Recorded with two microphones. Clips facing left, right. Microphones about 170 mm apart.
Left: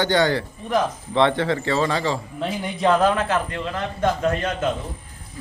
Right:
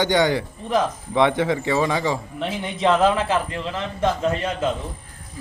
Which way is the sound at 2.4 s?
Centre (ahead or behind).